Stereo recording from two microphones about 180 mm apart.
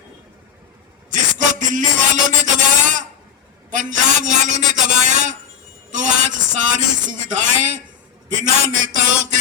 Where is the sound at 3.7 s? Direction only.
45° right (ahead or behind).